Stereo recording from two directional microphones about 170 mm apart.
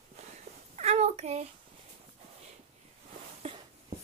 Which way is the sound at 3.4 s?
40° right (ahead or behind).